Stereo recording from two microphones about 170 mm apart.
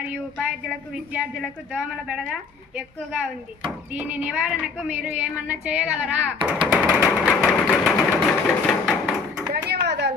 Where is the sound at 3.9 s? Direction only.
10° right (ahead or behind).